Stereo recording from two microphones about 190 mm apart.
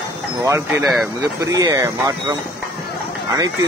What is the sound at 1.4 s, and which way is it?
Speech, 20° right (ahead or behind).